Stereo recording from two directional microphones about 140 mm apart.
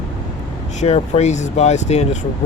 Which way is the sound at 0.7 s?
55° left (ahead or behind).